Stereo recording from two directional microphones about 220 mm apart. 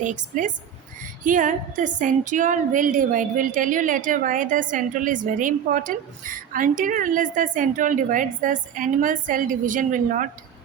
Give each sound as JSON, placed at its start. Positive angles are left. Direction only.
{"t": 0.0, "sound": "a woman's voice", "side_deg": -35}